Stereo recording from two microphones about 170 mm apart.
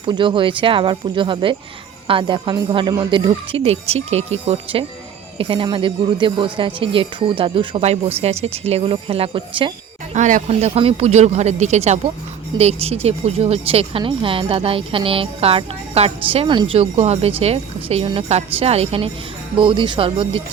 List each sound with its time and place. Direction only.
0.0 s speech: 30° right (ahead or behind)
10.2 s speech: 45° right (ahead or behind)